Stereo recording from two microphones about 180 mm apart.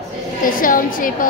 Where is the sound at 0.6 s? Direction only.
50° left (ahead or behind).